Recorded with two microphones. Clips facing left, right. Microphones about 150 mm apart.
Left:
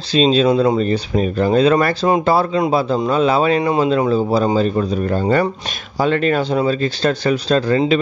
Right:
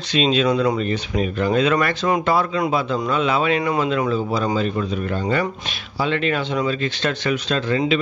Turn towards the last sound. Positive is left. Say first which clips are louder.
# left 5 dB
turn(degrees=40)  # may be behind; listen again after turning